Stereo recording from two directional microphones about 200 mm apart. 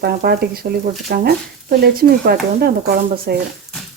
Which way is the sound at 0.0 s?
50° right (ahead or behind).